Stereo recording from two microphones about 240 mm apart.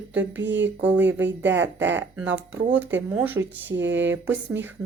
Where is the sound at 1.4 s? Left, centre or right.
Right.